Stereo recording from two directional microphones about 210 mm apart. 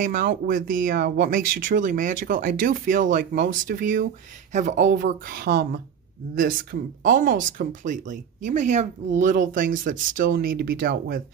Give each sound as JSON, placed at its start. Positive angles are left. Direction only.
{"t": 0.0, "sound": "speech", "side_deg": -40}